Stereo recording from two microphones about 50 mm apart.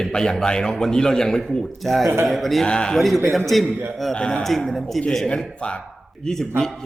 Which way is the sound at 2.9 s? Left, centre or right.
Centre.